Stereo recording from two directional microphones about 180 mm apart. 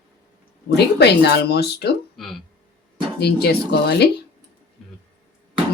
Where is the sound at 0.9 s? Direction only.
70° left (ahead or behind).